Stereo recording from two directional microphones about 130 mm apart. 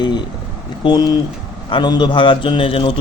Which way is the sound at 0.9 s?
30° left (ahead or behind).